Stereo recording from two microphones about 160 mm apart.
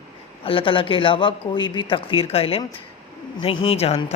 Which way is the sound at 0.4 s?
35° left (ahead or behind).